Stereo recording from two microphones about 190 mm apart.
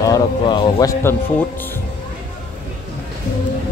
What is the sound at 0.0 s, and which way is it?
Speech, 20° left (ahead or behind).